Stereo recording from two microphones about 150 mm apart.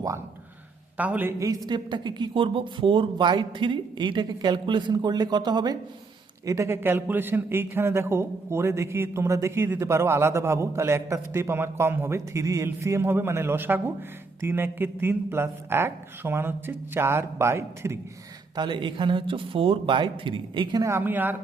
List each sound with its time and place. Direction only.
0.9 s a woman's voice: 10° right (ahead or behind)
18.5 s speech: 30° right (ahead or behind)
20.8 s a man's voice: 15° right (ahead or behind)